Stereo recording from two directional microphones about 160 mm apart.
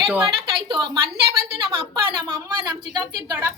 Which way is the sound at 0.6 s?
30° right (ahead or behind).